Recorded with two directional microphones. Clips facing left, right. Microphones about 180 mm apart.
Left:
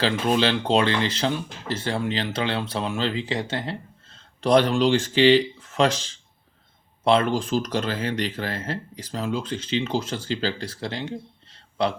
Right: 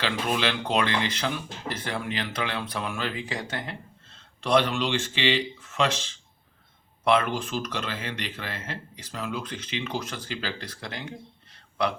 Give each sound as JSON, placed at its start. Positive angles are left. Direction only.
{"t": 0.0, "sound": "speech", "side_deg": 30}
{"t": 4.4, "sound": "speech", "side_deg": 40}
{"t": 7.0, "sound": "speech", "side_deg": 30}